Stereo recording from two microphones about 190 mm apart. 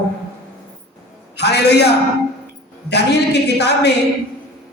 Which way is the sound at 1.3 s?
60° left (ahead or behind).